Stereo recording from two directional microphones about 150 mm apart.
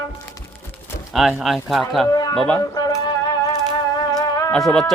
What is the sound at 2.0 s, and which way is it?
Speech, 25° left (ahead or behind).